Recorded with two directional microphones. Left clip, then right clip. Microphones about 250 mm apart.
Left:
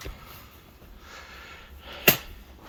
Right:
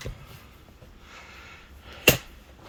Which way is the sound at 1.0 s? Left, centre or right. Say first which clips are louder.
Left 2 dB; centre.